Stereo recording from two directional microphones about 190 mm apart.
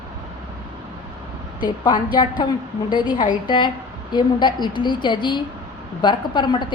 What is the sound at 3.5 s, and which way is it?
A woman's voice, 25° left (ahead or behind).